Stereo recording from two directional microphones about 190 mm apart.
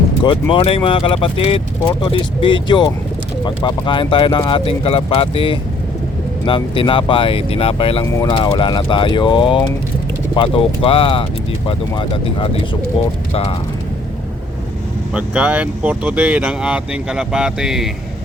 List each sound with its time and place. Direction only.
0.3 s speech: 30° left (ahead or behind)
15.1 s speech: 5° right (ahead or behind)